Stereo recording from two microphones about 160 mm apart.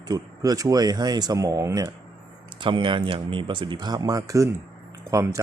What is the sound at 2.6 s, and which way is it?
Speech, 30° right (ahead or behind).